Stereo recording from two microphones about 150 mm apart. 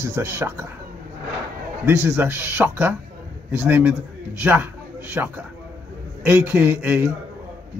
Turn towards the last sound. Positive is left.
turn(degrees=-10)  # may be behind; listen again after turning